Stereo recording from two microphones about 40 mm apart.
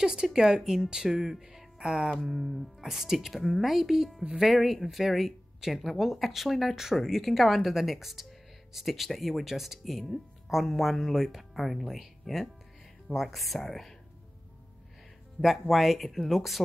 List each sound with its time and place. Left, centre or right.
0.0 s speech: centre
2.0 s speech: centre
2.3 s a woman's voice: centre
15.4 s a woman's voice: centre